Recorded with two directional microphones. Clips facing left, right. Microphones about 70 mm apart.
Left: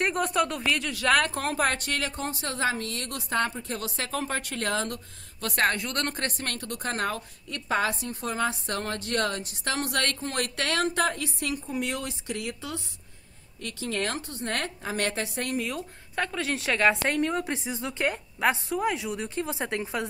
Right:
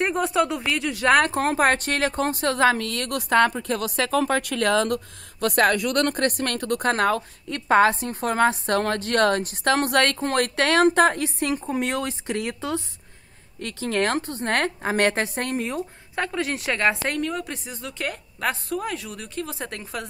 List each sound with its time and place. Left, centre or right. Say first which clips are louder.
0.1 s speech: right 4 dB; centre
0.9 s speech: right 6 dB; right
1.9 s a woman's voice: right 7 dB; right
2.2 s a woman's voice: right 10 dB; right
16.3 s a woman's voice: right 3 dB; centre
17.2 s speech: left 1 dB; left